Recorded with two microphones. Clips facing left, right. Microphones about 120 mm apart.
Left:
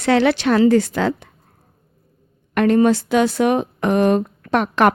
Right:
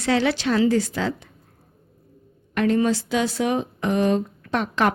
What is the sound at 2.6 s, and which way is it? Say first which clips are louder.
Speech: left 6 dB; 55° left (ahead or behind).